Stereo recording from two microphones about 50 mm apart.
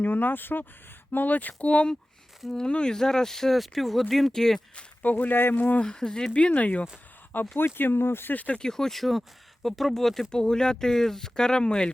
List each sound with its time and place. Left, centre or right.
0.0 s speech: left
2.5 s speech: centre
5.0 s speech: left
5.8 s speech: centre
7.3 s speech: left
8.5 s speech: centre